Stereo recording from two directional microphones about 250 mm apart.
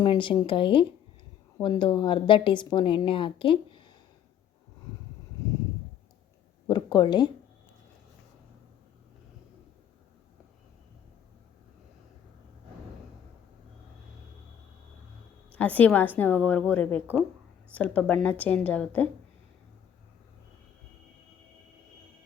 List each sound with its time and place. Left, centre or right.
0.0 s a woman's voice: centre
6.7 s speech: centre
15.5 s a woman's voice: centre